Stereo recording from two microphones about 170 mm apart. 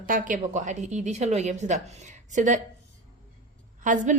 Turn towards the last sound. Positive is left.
turn(degrees=-50)  # may be behind; listen again after turning